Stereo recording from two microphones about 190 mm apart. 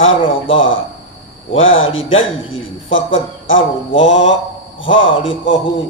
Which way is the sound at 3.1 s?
90° left.